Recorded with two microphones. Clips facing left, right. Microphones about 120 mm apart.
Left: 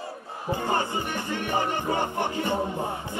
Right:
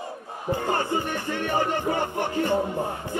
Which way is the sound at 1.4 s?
20° left (ahead or behind).